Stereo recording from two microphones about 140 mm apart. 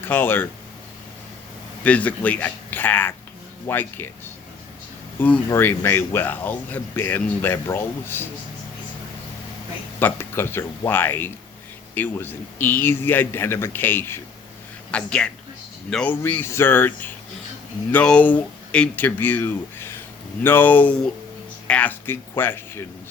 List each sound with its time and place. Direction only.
0.1 s speech: 15° left (ahead or behind)
1.8 s speech: 10° left (ahead or behind)
5.5 s speech: 15° left (ahead or behind)
10.0 s a woman's voice: 15° left (ahead or behind)